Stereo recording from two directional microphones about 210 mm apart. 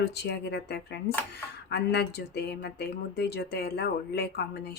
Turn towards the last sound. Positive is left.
turn(degrees=50)  # may be behind; listen again after turning